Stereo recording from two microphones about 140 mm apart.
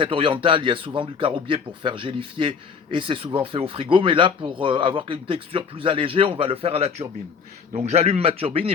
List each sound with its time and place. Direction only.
0.0 s a man's voice: 40° right (ahead or behind)